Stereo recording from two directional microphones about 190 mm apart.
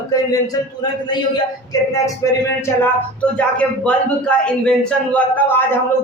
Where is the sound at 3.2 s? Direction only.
5° left (ahead or behind).